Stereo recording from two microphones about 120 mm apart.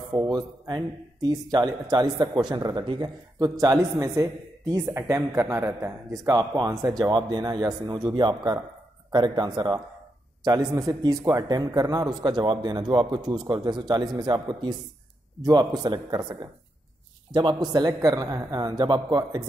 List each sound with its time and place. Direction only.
0.1 s a man's voice: 35° right (ahead or behind)
17.3 s a man's voice: 40° right (ahead or behind)